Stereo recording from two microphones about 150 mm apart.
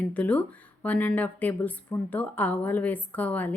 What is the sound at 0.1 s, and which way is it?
Speech, 10° left (ahead or behind).